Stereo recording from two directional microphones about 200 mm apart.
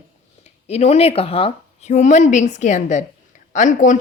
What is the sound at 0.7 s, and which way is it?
Speech, 30° left (ahead or behind).